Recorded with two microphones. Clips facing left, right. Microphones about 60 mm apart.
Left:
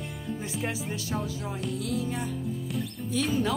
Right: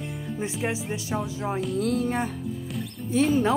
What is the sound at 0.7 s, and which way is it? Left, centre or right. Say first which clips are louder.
Speech: right 3 dB; centre.